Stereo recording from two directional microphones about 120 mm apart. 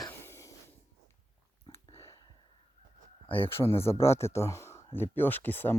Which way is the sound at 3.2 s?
50° left (ahead or behind).